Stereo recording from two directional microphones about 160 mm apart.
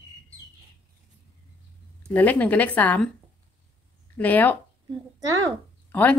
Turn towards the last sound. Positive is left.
turn(degrees=10)  # may be behind; listen again after turning